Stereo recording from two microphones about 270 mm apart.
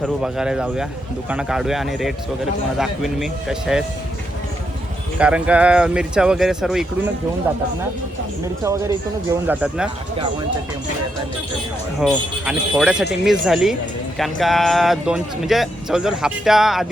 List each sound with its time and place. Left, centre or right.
0.0 s speech: centre
5.2 s speech: centre
8.6 s speech: centre
11.9 s speech: centre